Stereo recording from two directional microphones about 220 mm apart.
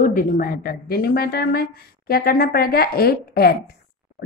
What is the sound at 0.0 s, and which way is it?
A woman's voice, 40° left (ahead or behind).